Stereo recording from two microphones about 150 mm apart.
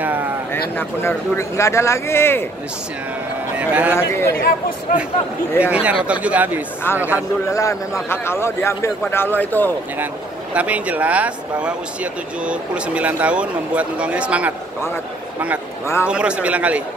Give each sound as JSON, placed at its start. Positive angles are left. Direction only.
{"t": 0.0, "sound": "a sound", "side_deg": -10}
{"t": 0.7, "sound": "speech", "side_deg": 15}
{"t": 3.5, "sound": "speech", "side_deg": -10}
{"t": 3.9, "sound": "speech", "side_deg": 15}
{"t": 4.4, "sound": "speech", "side_deg": 75}
{"t": 5.6, "sound": "speech", "side_deg": -10}
{"t": 7.4, "sound": "speech", "side_deg": 20}
{"t": 10.5, "sound": "speech", "side_deg": -10}
{"t": 16.1, "sound": "speech", "side_deg": -5}